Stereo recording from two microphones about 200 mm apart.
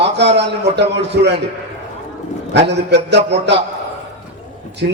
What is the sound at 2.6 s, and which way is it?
Speech, 60° right (ahead or behind).